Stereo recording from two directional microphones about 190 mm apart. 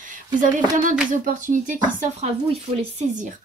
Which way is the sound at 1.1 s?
45° right (ahead or behind).